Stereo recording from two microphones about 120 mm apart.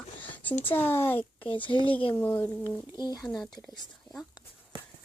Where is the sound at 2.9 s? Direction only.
35° left (ahead or behind).